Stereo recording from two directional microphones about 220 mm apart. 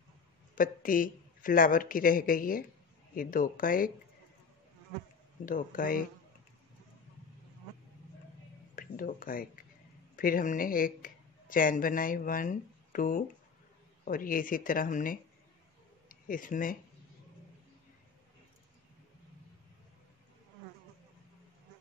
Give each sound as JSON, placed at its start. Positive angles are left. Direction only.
{"t": 0.6, "sound": "a woman's voice", "side_deg": 40}
{"t": 5.4, "sound": "a woman's voice", "side_deg": 40}
{"t": 8.7, "sound": "a woman's voice", "side_deg": 40}